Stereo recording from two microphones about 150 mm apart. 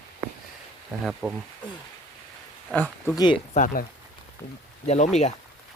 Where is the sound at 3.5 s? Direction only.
60° left (ahead or behind).